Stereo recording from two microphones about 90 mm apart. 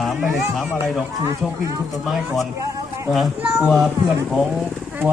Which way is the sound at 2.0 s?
Centre (ahead or behind).